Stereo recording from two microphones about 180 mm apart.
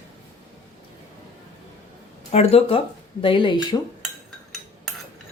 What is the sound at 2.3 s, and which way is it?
Speech, 35° left (ahead or behind).